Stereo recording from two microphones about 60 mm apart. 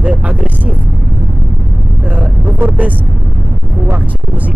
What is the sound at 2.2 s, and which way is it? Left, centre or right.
Speech, right.